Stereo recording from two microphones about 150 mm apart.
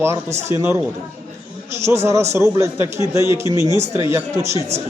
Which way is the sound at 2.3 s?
20° right (ahead or behind).